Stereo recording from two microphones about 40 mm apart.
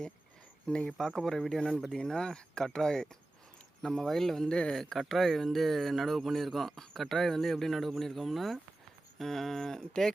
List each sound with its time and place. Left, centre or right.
0.7 s speech: left